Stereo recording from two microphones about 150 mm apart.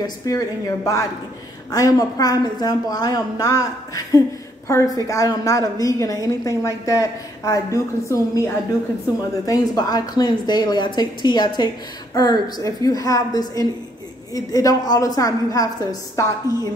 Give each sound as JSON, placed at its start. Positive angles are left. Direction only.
{"t": 0.0, "sound": "a woman's voice", "side_deg": 20}
{"t": 9.5, "sound": "a woman's voice", "side_deg": 25}